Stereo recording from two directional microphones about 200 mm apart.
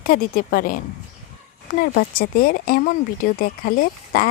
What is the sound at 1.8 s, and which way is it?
Speech, 45° left (ahead or behind).